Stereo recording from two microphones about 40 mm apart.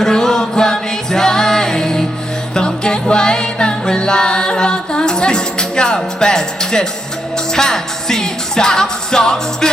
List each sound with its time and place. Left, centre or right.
0.0 s music: centre